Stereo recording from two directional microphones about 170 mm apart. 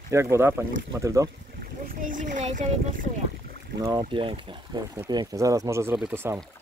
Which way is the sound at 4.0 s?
30° right (ahead or behind).